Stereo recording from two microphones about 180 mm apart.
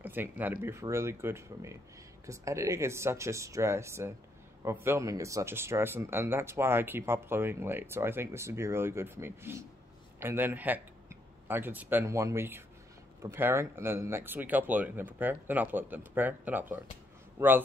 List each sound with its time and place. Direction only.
0.0 s speech: 10° right (ahead or behind)